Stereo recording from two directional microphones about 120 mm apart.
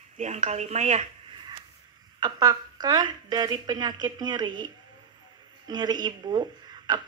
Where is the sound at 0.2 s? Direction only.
75° right (ahead or behind).